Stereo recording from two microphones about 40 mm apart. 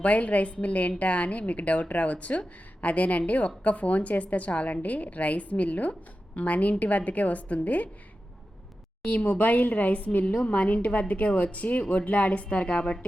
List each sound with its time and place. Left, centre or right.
0.0 s a woman's voice: left
9.0 s a woman's voice: left